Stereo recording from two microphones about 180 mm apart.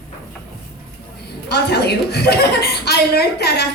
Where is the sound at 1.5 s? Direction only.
65° left (ahead or behind).